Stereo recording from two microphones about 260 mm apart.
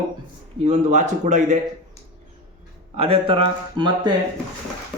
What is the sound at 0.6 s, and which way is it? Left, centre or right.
Speech, right.